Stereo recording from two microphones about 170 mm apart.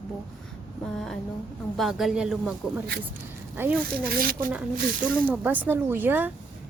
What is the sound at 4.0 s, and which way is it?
Speech, 60° right (ahead or behind).